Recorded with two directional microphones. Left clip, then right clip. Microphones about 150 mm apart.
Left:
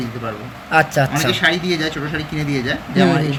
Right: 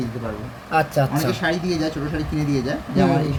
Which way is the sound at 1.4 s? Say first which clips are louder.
Left 5 dB; 40° right (ahead or behind).